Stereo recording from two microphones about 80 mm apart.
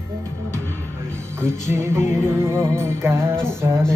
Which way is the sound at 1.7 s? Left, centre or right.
Right.